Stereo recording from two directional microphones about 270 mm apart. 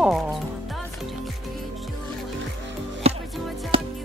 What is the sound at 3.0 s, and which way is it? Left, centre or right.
Music, right.